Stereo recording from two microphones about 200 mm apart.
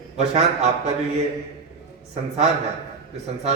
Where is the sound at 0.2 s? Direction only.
35° right (ahead or behind).